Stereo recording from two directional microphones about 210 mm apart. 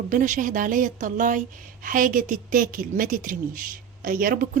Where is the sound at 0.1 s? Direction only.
40° right (ahead or behind).